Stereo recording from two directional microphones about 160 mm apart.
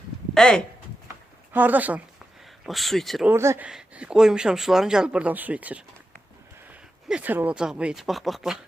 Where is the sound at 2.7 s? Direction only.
Centre (ahead or behind).